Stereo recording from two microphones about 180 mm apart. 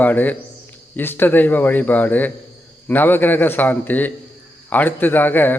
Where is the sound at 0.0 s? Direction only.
10° left (ahead or behind).